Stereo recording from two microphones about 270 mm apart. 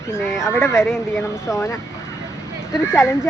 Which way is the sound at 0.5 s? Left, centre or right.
Centre.